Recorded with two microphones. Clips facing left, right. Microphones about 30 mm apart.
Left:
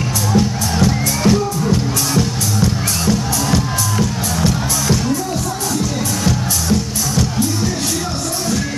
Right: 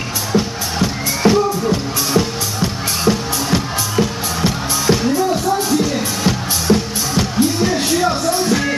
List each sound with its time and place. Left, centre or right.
0.3 s music: centre